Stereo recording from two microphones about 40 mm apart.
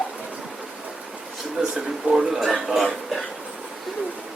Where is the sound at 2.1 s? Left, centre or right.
Right.